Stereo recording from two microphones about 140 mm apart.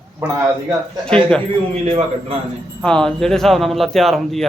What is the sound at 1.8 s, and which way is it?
Speech, 45° right (ahead or behind).